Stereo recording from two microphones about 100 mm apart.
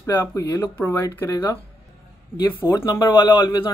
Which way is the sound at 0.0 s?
30° left (ahead or behind).